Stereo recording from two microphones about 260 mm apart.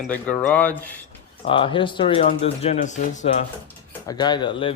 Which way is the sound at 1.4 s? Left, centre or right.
Centre.